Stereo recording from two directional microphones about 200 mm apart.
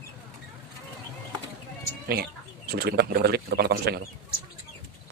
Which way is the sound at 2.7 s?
50° right (ahead or behind).